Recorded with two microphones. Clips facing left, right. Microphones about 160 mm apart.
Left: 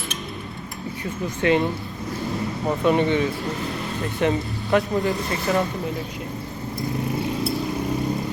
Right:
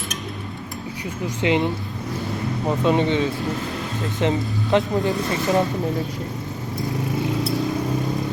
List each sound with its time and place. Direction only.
1.4 s speech: 20° right (ahead or behind)